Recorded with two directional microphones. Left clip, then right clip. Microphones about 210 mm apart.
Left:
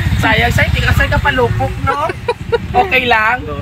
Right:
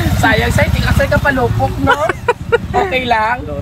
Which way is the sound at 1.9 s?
5° right (ahead or behind).